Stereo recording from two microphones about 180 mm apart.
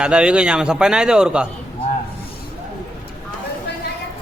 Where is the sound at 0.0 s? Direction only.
5° right (ahead or behind).